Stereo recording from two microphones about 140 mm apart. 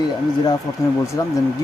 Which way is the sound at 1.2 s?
20° left (ahead or behind).